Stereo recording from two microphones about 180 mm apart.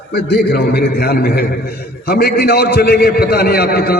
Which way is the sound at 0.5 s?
65° left (ahead or behind).